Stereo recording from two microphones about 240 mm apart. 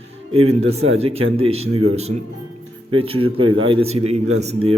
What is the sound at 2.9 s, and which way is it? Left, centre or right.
A man's voice, right.